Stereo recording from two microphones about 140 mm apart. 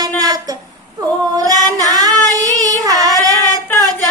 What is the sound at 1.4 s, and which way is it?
Female singing, 30° right (ahead or behind).